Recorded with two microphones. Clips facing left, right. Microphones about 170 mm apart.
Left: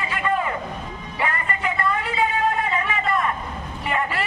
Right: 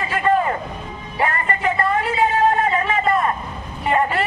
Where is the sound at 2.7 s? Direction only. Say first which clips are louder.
Right 5 dB; 35° right (ahead or behind).